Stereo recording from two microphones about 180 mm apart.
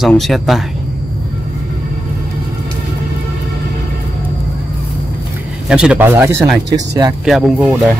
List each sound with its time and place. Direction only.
0.0 s speech: centre (ahead or behind)
5.7 s speech: 5° right (ahead or behind)
7.2 s speech: centre (ahead or behind)